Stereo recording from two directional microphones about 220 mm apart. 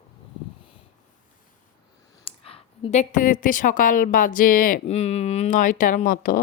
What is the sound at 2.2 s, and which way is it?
A woman's voice, 25° left (ahead or behind).